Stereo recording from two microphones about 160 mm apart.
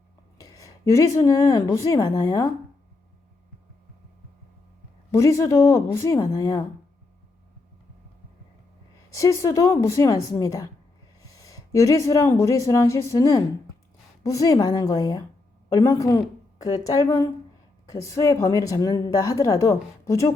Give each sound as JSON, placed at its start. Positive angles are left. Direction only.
{"t": 0.3, "sound": "speech", "side_deg": 20}
{"t": 5.1, "sound": "a woman's voice", "side_deg": 20}
{"t": 9.0, "sound": "a woman's voice", "side_deg": 20}